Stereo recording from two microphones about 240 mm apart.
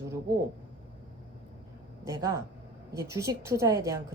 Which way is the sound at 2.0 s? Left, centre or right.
Centre.